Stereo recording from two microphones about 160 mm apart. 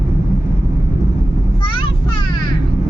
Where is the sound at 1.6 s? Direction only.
30° left (ahead or behind).